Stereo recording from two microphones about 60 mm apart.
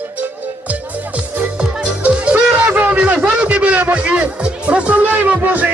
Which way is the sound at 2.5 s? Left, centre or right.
Right.